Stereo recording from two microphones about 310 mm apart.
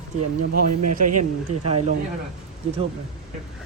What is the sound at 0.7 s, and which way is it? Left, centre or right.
Speech, right.